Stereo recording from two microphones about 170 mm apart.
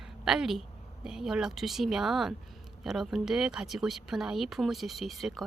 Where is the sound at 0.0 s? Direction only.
5° right (ahead or behind).